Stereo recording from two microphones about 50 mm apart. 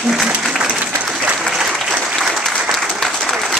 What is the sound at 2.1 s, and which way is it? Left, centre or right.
Applause, centre.